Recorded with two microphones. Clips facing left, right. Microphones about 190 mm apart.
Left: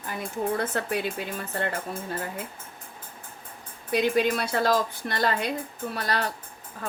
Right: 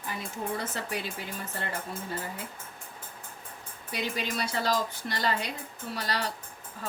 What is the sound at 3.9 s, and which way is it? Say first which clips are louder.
A woman's voice: left 10 dB; 55° left (ahead or behind).